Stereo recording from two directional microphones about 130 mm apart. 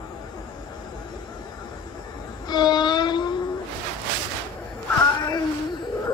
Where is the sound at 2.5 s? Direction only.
35° left (ahead or behind).